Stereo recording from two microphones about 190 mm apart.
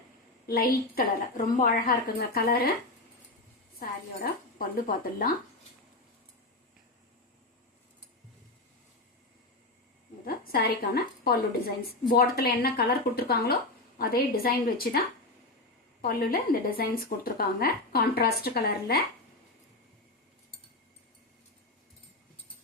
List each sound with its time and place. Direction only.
0.4 s a woman's voice: 55° left (ahead or behind)
3.8 s speech: 50° left (ahead or behind)
10.2 s a woman's voice: 50° left (ahead or behind)